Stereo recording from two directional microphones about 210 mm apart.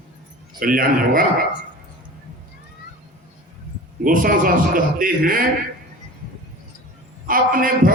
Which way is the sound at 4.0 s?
40° right (ahead or behind).